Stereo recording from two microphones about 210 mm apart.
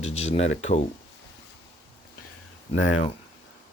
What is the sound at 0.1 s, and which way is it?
Speech, 30° left (ahead or behind).